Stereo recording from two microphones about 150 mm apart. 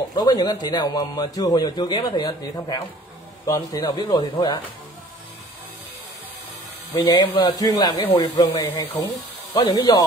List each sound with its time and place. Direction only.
0.1 s a man's voice: 25° left (ahead or behind)
6.9 s a man's voice: 30° left (ahead or behind)